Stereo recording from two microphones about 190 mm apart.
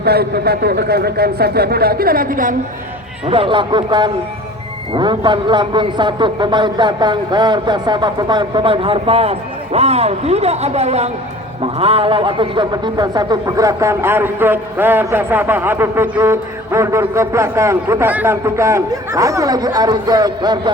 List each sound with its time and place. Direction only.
0.0 s speech: 55° right (ahead or behind)
3.2 s a man's voice: 30° right (ahead or behind)